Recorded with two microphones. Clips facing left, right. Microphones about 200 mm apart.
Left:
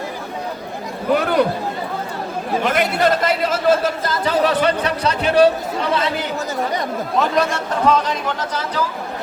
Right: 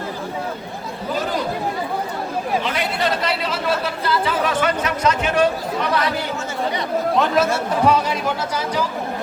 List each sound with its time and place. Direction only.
1.1 s chatter: 65° left (ahead or behind)
2.6 s speech: 50° left (ahead or behind)
7.2 s speech: 5° right (ahead or behind)